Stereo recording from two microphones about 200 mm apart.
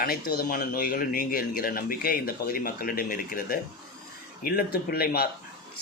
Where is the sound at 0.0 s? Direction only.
50° left (ahead or behind).